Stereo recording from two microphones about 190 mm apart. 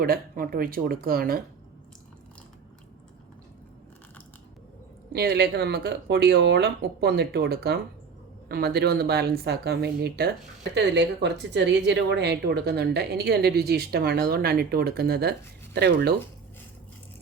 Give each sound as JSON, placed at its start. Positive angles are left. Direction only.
{"t": 0.0, "sound": "speech", "side_deg": -50}
{"t": 5.1, "sound": "speech", "side_deg": -55}